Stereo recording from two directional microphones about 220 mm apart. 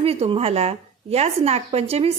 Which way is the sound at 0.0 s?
25° right (ahead or behind).